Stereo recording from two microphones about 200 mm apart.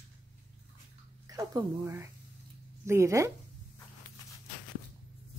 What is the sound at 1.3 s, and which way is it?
Speech, 20° right (ahead or behind).